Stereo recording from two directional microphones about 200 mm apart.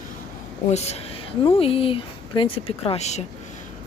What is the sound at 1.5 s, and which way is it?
Speech, 30° left (ahead or behind).